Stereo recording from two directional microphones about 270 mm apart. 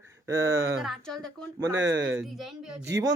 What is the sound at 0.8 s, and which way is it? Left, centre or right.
Speech, centre.